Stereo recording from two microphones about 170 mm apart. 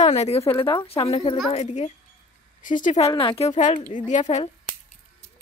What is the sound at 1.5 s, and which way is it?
Speech, 40° left (ahead or behind).